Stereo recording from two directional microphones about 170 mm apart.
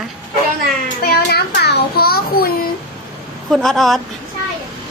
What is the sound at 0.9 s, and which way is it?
A child's voice, 65° left (ahead or behind).